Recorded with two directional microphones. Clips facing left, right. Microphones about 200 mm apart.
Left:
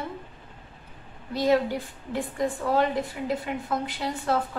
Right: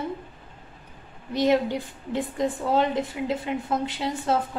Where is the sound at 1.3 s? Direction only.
20° right (ahead or behind).